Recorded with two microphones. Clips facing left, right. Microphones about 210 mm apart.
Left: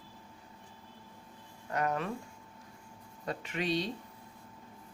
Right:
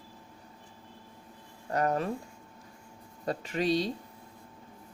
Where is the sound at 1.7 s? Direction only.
40° right (ahead or behind).